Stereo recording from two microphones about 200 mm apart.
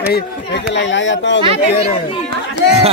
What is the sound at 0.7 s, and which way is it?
Speech, 65° left (ahead or behind).